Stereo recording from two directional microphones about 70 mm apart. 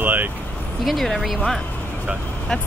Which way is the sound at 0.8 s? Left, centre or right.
Centre.